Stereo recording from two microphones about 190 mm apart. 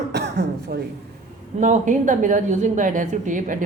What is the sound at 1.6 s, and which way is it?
A woman's voice, 40° right (ahead or behind).